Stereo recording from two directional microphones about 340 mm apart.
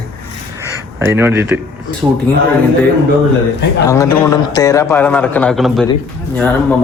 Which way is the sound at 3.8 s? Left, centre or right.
Centre.